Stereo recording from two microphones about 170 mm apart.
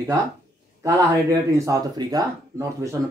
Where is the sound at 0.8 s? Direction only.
20° right (ahead or behind).